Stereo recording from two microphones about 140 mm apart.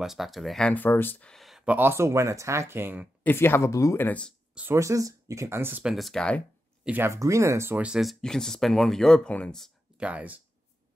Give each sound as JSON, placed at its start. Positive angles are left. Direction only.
{"t": 0.0, "sound": "speech", "side_deg": 0}
{"t": 1.3, "sound": "speech", "side_deg": 0}
{"t": 3.3, "sound": "speech", "side_deg": 15}
{"t": 4.6, "sound": "speech", "side_deg": -20}
{"t": 5.9, "sound": "speech", "side_deg": 0}
{"t": 6.8, "sound": "speech", "side_deg": -15}
{"t": 9.9, "sound": "speech", "side_deg": -10}